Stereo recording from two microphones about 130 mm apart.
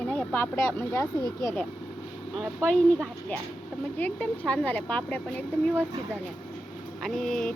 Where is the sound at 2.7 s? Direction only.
5° left (ahead or behind).